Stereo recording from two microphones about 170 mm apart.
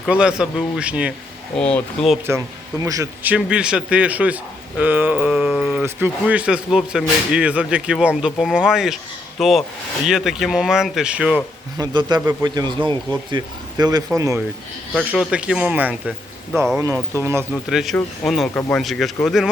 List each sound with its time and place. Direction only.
0.0 s speech: 5° right (ahead or behind)
1.5 s speech: 5° left (ahead or behind)
2.8 s a man's voice: 20° right (ahead or behind)
3.3 s speech: 5° right (ahead or behind)
5.8 s speech: 10° right (ahead or behind)
11.8 s a man's voice: 25° right (ahead or behind)
14.9 s speech: 5° right (ahead or behind)
16.7 s speech: 15° right (ahead or behind)
17.5 s speech: centre (ahead or behind)